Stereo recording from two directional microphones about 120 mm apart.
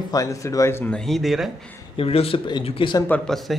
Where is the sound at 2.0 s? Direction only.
50° left (ahead or behind).